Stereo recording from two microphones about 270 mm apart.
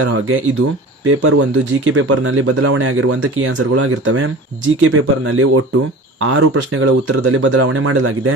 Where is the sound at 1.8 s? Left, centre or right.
Right.